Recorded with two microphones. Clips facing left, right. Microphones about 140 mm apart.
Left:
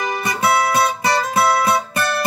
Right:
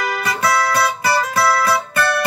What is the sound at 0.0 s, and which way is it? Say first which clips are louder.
Music: even; 25° left (ahead or behind).